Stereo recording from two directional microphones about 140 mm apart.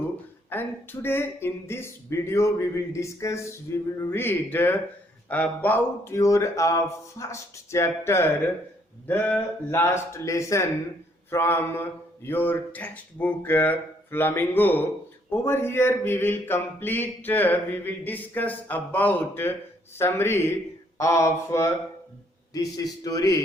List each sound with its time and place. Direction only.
0.5 s speech: 15° left (ahead or behind)